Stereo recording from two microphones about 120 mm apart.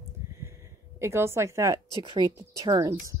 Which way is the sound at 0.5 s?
25° right (ahead or behind).